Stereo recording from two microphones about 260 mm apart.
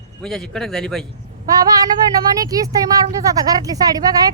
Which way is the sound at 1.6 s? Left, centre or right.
Centre.